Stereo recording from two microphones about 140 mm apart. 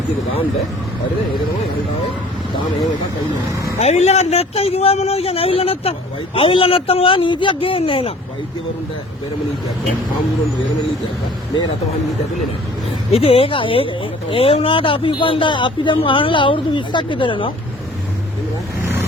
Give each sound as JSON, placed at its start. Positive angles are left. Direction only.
{"t": 3.8, "sound": "a man's voice", "side_deg": 50}
{"t": 13.1, "sound": "speech", "side_deg": 45}